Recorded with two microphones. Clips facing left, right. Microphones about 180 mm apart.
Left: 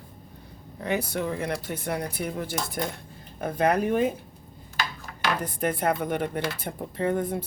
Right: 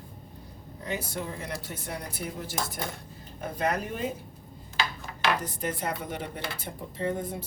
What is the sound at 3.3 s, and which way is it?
Speech, 55° left (ahead or behind).